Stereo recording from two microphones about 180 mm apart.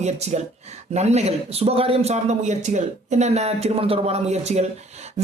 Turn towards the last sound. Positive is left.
turn(degrees=-40)  # may be behind; listen again after turning